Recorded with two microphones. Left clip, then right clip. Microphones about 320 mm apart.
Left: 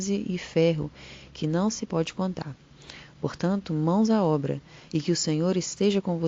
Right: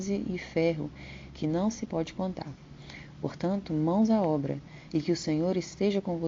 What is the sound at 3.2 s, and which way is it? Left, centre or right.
Speech, left.